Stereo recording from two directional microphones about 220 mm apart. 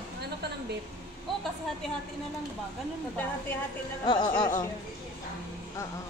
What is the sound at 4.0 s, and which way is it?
Speech, 20° left (ahead or behind).